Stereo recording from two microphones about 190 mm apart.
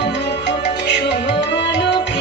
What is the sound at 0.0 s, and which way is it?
Music, 65° left (ahead or behind).